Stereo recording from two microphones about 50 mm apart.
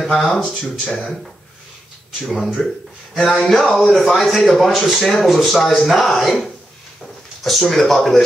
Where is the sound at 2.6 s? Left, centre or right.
Left.